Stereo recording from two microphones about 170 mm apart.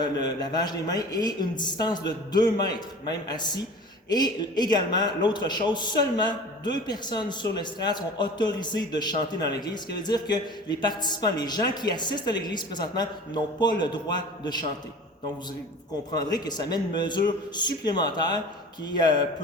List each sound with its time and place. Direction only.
0.0 s speech: 25° left (ahead or behind)
16.1 s speech: 25° left (ahead or behind)